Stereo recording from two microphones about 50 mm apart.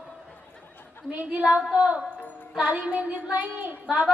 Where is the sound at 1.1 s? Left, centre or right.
Right.